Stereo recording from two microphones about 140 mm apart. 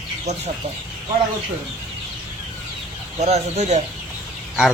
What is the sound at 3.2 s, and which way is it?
Speech, 50° right (ahead or behind).